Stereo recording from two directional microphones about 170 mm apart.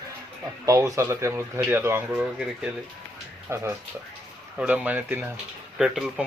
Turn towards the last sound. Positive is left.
turn(degrees=0)  # may be behind; listen again after turning